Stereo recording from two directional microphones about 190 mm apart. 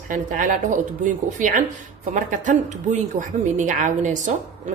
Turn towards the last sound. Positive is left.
turn(degrees=-40)  # may be behind; listen again after turning